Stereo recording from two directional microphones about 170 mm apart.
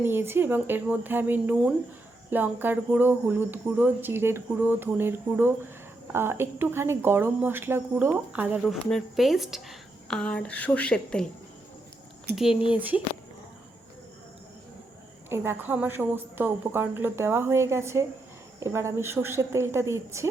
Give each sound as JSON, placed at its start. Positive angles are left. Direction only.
{"t": 0.0, "sound": "a woman's voice", "side_deg": -15}
{"t": 12.4, "sound": "a woman's voice", "side_deg": -5}
{"t": 15.3, "sound": "speech", "side_deg": -15}